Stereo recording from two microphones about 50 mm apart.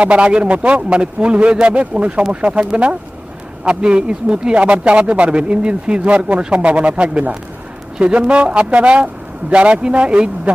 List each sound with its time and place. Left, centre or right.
0.0 s speech: right